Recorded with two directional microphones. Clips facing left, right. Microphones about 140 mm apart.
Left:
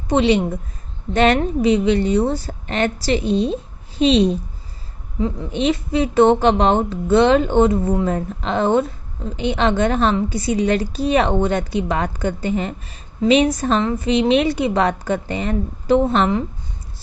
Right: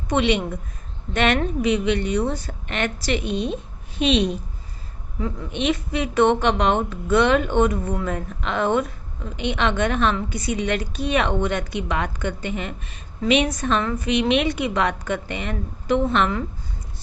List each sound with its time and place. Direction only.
0.1 s a woman's voice: 30° left (ahead or behind)
5.5 s a woman's voice: 35° left (ahead or behind)